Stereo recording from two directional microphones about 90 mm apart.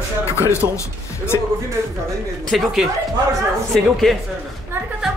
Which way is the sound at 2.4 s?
Centre (ahead or behind).